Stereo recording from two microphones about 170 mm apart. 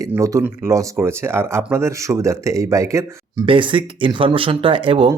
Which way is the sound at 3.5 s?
30° right (ahead or behind).